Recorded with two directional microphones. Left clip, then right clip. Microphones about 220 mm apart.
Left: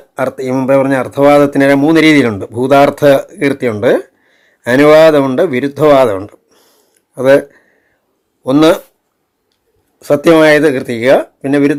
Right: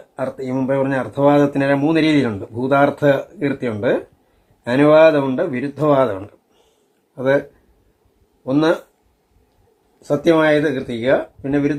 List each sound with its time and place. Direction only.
0.2 s speech: 30° left (ahead or behind)
8.4 s speech: 35° left (ahead or behind)
10.0 s speech: 35° left (ahead or behind)